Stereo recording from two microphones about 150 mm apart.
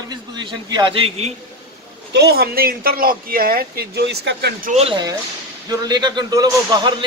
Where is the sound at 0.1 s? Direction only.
30° right (ahead or behind).